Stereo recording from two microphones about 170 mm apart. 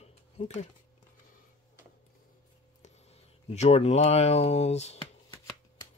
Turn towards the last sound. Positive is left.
turn(degrees=40)  # may be behind; listen again after turning